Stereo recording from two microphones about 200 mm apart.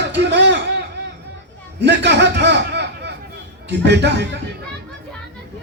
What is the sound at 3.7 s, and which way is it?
Speech, 60° right (ahead or behind).